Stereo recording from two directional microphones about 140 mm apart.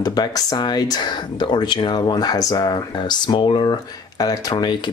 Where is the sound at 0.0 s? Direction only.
30° left (ahead or behind).